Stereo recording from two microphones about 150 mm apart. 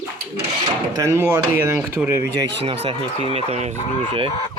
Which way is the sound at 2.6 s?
40° right (ahead or behind).